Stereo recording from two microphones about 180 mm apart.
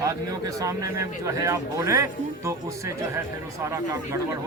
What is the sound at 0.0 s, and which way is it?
A man's voice, 20° right (ahead or behind).